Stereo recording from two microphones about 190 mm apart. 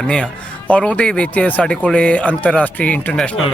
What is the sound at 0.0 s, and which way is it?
Speech, 5° left (ahead or behind).